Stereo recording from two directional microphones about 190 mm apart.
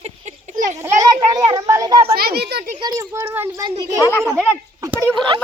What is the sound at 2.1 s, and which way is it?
Speech, 55° right (ahead or behind).